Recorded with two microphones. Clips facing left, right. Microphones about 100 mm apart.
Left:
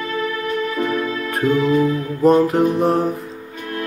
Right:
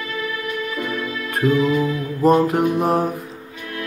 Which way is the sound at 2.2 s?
Centre (ahead or behind).